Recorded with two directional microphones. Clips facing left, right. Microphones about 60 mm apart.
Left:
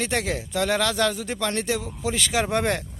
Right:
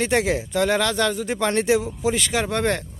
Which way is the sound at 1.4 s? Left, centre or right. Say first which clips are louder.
Right 7 dB; right.